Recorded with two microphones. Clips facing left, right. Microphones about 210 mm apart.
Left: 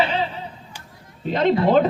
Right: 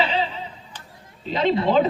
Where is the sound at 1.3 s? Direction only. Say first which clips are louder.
Left 2 dB; 50° left (ahead or behind).